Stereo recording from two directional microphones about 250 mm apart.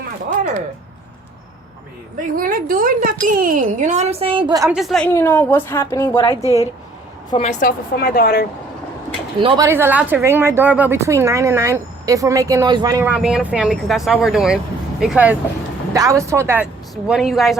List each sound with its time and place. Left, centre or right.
2.3 s speech: right; by 4.7 s centre
4.7 s a woman's voice: centre
6.3 s a woman's voice: centre
7.3 s a woman's voice: left
9.4 s speech: right
9.6 s a woman's voice: centre